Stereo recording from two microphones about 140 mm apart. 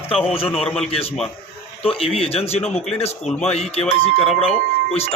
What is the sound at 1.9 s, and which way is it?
Speech, 45° left (ahead or behind).